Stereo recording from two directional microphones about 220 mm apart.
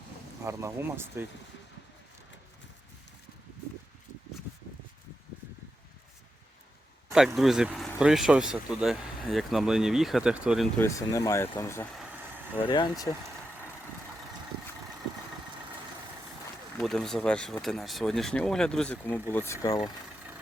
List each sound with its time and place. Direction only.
0.4 s speech: 10° right (ahead or behind)
7.3 s speech: centre (ahead or behind)
10.8 s speech: 15° left (ahead or behind)
16.7 s speech: centre (ahead or behind)